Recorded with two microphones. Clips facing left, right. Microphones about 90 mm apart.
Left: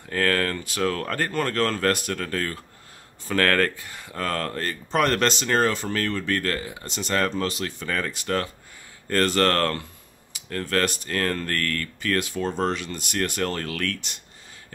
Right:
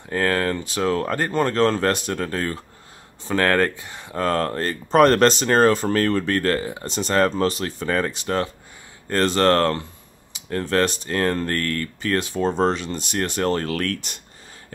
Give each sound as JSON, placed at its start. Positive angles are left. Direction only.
{"t": 0.1, "sound": "speech", "side_deg": -20}